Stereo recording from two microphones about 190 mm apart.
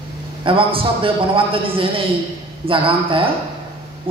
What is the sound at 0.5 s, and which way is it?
A man's voice, 30° right (ahead or behind).